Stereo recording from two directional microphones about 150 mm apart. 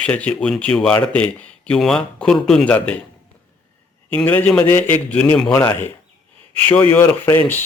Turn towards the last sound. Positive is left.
turn(degrees=15)  # may be behind; listen again after turning